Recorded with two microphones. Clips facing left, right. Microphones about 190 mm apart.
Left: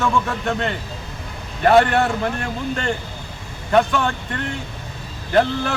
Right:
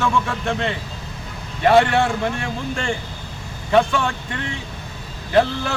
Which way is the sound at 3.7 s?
Centre (ahead or behind).